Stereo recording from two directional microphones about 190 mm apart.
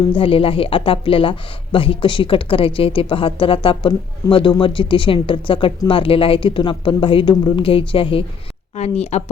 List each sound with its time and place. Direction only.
0.1 s speech: 30° left (ahead or behind)